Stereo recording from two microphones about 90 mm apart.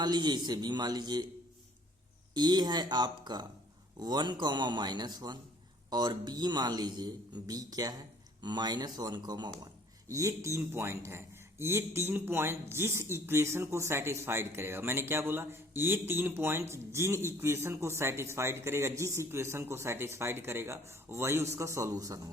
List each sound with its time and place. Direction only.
0.0 s a man's voice: 50° right (ahead or behind)
2.3 s a man's voice: 50° right (ahead or behind)
10.1 s speech: 35° right (ahead or behind)